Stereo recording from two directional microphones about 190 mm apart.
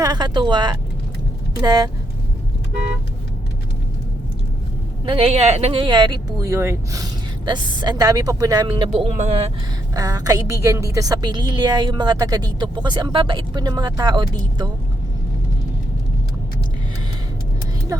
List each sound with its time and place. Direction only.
0.0 s a woman's voice: 20° right (ahead or behind)
5.0 s a woman's voice: 30° right (ahead or behind)
9.9 s a woman's voice: 20° right (ahead or behind)